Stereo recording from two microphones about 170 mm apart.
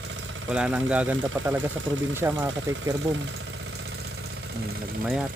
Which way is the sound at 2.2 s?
20° right (ahead or behind).